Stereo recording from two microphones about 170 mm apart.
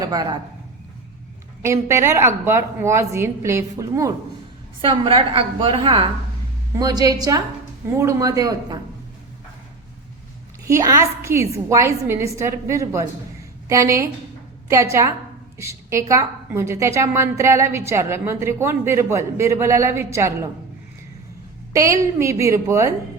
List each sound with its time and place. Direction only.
0.0 s a man's voice: 20° right (ahead or behind)
1.6 s a woman's voice: 15° right (ahead or behind)
4.9 s a woman's voice: 30° right (ahead or behind)
10.7 s a woman's voice: 20° right (ahead or behind)
21.7 s a woman's voice: 20° right (ahead or behind)